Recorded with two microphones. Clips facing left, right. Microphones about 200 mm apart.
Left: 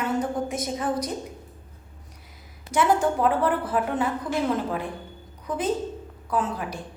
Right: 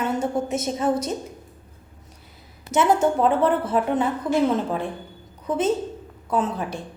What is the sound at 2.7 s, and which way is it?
A woman's voice, 25° right (ahead or behind).